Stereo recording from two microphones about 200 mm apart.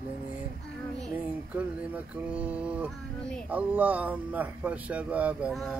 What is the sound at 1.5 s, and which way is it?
Speech, 5° right (ahead or behind).